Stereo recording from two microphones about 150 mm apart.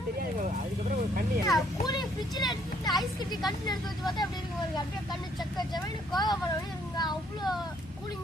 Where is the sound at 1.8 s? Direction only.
30° left (ahead or behind).